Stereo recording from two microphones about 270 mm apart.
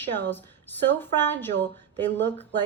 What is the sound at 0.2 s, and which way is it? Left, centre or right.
A woman's voice, centre.